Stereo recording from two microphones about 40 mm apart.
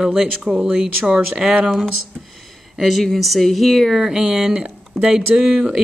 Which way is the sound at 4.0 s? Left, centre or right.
Centre.